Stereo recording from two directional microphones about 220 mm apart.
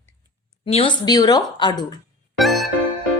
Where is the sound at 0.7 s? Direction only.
25° left (ahead or behind).